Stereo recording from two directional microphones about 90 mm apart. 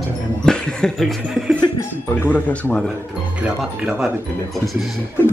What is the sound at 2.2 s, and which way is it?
Speech, 20° left (ahead or behind).